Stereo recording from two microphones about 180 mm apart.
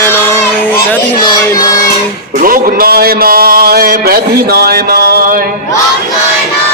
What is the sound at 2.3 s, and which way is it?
A man's voice, 50° right (ahead or behind).